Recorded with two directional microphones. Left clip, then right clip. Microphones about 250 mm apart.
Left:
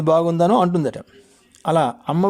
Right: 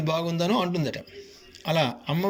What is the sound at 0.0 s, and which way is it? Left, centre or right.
Speech, left.